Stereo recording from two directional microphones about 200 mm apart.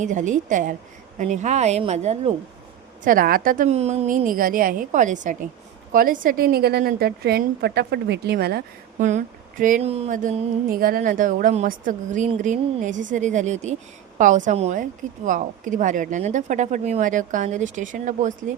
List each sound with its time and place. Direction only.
0.0 s a woman's voice: 40° right (ahead or behind)
3.0 s a woman's voice: 45° right (ahead or behind)
9.0 s a woman's voice: 40° right (ahead or behind)